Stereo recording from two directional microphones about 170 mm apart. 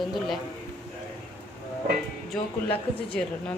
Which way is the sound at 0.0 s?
Centre (ahead or behind).